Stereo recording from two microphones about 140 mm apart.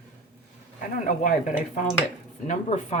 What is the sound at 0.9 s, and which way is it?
Speech, 65° left (ahead or behind).